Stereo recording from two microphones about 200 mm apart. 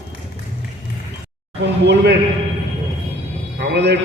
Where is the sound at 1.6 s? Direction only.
60° right (ahead or behind).